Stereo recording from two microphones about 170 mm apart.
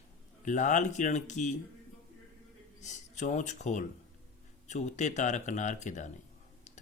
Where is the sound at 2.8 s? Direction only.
45° left (ahead or behind).